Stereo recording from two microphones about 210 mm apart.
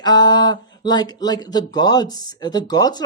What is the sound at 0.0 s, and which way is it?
Speech, 20° left (ahead or behind).